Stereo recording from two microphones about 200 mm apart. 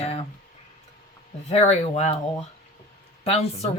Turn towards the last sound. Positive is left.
turn(degrees=30)  # may be behind; listen again after turning